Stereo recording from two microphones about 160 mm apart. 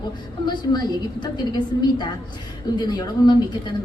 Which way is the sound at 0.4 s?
25° left (ahead or behind).